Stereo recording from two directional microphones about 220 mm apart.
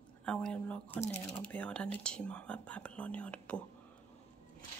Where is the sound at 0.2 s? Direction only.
5° left (ahead or behind).